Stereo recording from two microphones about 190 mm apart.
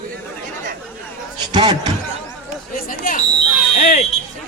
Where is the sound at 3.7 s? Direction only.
45° left (ahead or behind).